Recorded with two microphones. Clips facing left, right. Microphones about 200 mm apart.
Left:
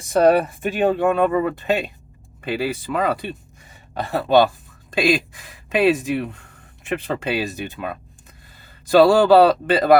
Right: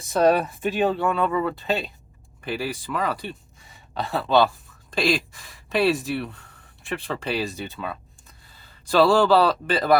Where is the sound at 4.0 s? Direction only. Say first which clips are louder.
Left 3 dB; 55° left (ahead or behind).